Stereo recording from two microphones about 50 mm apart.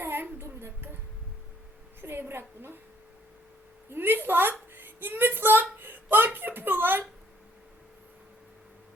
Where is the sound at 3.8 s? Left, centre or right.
Right.